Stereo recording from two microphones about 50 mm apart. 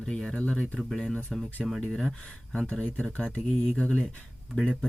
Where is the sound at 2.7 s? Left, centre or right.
Left.